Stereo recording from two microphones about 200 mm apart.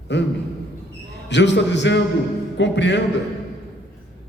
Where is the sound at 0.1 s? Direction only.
60° left (ahead or behind).